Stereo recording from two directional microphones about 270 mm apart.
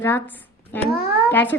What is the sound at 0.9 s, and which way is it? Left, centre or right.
Speech, left.